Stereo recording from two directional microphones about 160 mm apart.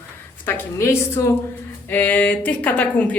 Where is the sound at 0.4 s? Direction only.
15° left (ahead or behind).